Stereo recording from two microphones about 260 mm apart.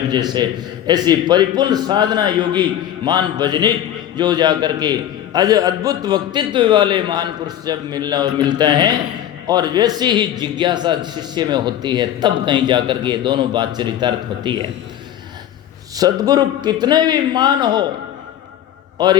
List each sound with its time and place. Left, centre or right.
0.1 s a man's voice: centre
16.0 s a man's voice: centre
19.0 s a man's voice: centre